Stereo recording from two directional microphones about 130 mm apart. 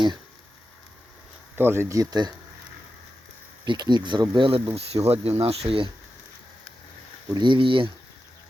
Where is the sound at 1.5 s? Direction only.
20° right (ahead or behind).